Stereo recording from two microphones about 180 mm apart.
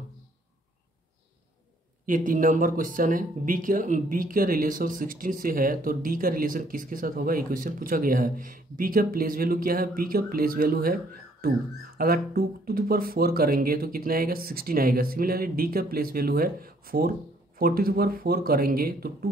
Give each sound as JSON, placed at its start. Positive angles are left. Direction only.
{"t": 2.0, "sound": "speech", "side_deg": -50}
{"t": 12.0, "sound": "speech", "side_deg": -55}